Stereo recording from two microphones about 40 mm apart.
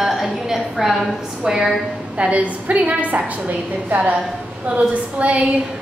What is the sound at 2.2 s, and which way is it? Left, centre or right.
A woman's voice, right.